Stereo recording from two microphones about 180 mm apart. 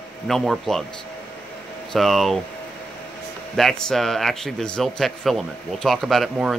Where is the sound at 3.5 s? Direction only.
Centre (ahead or behind).